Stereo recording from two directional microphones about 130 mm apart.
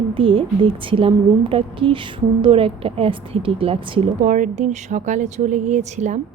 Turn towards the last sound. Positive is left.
turn(degrees=-65)  # may be behind; listen again after turning